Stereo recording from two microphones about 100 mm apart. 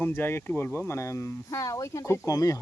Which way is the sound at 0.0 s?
20° left (ahead or behind).